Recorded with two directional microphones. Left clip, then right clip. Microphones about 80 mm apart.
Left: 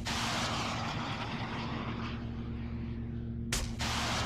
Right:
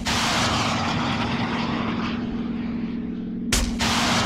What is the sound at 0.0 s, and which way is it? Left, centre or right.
Vehicle, centre.